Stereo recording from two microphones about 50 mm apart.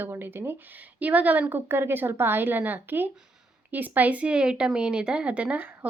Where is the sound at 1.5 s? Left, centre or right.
Right.